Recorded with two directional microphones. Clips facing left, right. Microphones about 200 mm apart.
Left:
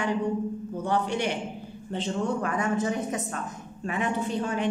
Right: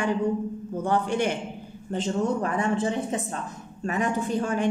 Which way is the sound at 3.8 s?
45° right (ahead or behind).